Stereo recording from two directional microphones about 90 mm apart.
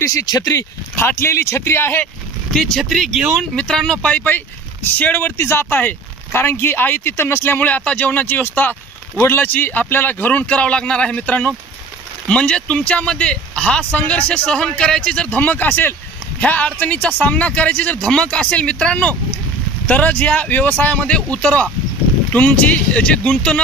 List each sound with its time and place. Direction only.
0.0 s speech: 40° left (ahead or behind)
0.9 s speech: 25° left (ahead or behind)
2.5 s speech: 5° left (ahead or behind)